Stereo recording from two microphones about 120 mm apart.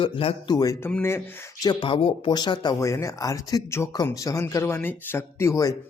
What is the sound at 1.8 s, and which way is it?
Speech, 45° left (ahead or behind).